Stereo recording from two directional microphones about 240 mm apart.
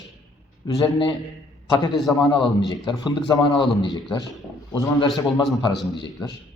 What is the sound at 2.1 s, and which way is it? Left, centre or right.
A man's voice, centre.